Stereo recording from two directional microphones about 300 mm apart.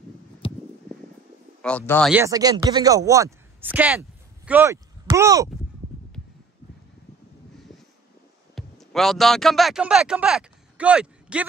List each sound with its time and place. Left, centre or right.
0.4 s a sound: centre
1.6 s speech: centre
8.5 s speech: centre